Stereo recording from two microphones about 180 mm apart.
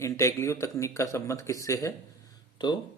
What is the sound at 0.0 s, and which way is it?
Speech, 15° left (ahead or behind).